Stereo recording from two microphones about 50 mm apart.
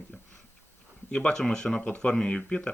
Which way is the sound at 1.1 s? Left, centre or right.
Centre.